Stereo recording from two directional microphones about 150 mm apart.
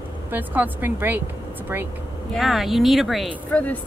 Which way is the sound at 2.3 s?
Centre (ahead or behind).